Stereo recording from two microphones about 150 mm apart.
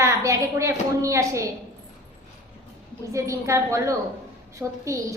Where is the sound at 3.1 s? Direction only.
20° right (ahead or behind).